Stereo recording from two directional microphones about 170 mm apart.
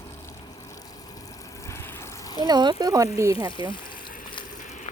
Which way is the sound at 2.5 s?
25° right (ahead or behind).